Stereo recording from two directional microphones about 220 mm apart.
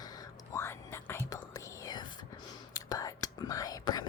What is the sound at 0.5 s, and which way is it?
Whispering, 10° left (ahead or behind).